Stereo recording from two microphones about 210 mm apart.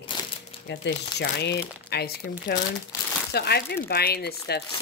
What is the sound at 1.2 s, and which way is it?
Speech, 50° left (ahead or behind).